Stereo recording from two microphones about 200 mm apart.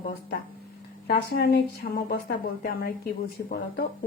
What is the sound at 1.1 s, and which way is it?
Speech, 50° left (ahead or behind).